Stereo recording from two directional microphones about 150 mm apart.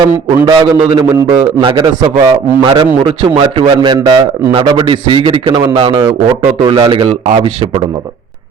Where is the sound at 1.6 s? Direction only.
35° right (ahead or behind).